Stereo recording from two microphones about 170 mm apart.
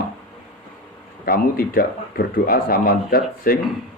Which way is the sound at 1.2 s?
60° left (ahead or behind).